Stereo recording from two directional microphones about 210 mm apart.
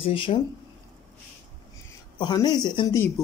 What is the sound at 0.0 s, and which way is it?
Speech, 25° left (ahead or behind).